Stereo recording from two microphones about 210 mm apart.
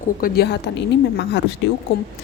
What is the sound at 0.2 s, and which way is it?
Speech, 50° left (ahead or behind).